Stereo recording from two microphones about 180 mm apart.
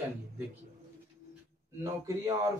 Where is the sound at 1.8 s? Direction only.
20° right (ahead or behind).